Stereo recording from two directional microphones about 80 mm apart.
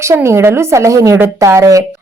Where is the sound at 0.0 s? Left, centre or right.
Right.